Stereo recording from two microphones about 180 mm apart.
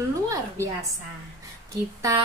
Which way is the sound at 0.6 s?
15° right (ahead or behind).